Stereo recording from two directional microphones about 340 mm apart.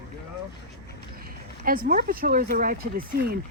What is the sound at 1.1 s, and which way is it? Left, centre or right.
Speech, right.